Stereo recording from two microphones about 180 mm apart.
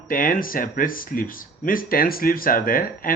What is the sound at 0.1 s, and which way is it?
Speech, 50° left (ahead or behind).